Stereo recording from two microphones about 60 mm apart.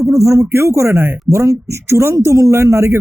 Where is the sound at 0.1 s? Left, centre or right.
Right.